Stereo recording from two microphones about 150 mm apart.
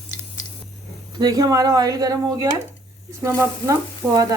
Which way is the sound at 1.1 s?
25° right (ahead or behind).